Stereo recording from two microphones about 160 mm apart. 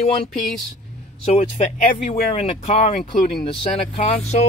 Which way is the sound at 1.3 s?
50° left (ahead or behind).